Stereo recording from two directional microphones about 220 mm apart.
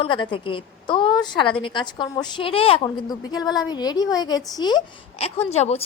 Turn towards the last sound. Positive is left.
turn(degrees=30)  # may be behind; listen again after turning